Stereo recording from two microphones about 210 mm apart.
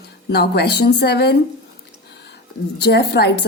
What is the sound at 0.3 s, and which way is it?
A woman's voice, 50° left (ahead or behind).